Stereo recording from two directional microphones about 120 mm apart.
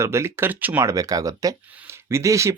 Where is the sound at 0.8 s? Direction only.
30° right (ahead or behind).